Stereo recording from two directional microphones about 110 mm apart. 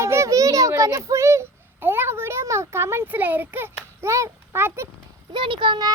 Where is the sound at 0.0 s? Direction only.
25° right (ahead or behind).